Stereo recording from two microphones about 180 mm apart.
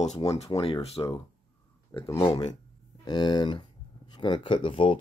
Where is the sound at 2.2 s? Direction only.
25° left (ahead or behind).